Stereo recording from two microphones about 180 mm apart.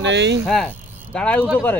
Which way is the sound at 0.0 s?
80° right.